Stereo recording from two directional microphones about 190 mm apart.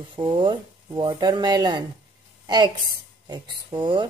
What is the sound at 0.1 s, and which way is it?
A woman's voice, 25° right (ahead or behind).